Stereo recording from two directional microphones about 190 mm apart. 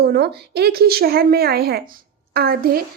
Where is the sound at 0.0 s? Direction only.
60° right (ahead or behind).